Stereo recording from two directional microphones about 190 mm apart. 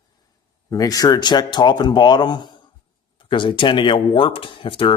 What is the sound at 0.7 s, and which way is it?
Speech, 20° left (ahead or behind).